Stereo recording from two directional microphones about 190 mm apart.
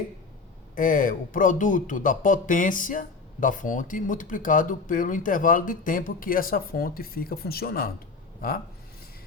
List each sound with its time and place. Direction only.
0.8 s speech: 45° left (ahead or behind)